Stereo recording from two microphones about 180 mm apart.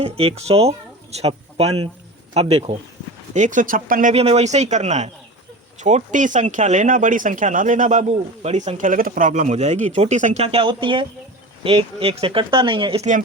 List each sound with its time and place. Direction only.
0.0 s speech: 35° right (ahead or behind)
4.1 s speech: 35° right (ahead or behind)